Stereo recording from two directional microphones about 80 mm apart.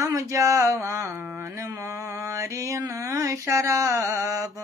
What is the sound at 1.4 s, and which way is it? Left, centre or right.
Mantra, right.